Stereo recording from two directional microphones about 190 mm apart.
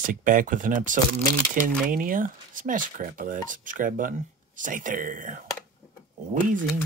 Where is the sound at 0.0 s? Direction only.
45° right (ahead or behind).